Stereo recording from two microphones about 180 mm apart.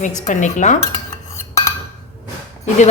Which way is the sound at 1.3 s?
15° left (ahead or behind).